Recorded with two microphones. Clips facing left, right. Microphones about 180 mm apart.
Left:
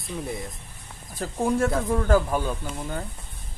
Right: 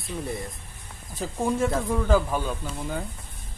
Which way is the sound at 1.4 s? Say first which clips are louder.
Left 2 dB; centre (ahead or behind).